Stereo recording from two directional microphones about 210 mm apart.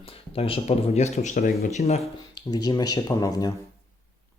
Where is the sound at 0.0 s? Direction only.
25° left (ahead or behind).